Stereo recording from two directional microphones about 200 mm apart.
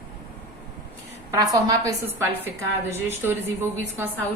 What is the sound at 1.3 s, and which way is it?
A woman's voice, 20° right (ahead or behind).